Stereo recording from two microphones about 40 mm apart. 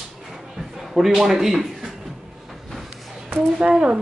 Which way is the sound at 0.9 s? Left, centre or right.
Centre.